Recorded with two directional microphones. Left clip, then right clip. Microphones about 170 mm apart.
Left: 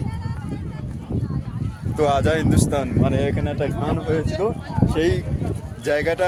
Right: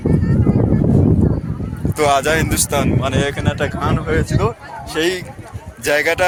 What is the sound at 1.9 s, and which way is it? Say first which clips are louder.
Speech: right 5 dB; centre (ahead or behind).